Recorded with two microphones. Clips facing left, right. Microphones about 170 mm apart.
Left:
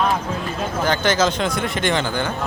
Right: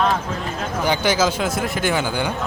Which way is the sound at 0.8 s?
10° right (ahead or behind).